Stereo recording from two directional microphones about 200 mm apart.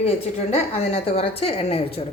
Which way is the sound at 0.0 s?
30° left (ahead or behind).